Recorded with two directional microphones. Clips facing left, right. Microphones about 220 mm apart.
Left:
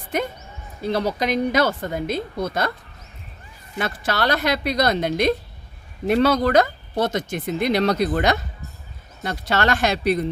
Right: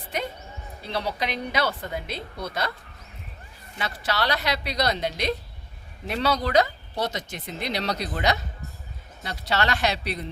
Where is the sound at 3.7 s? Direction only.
50° left (ahead or behind).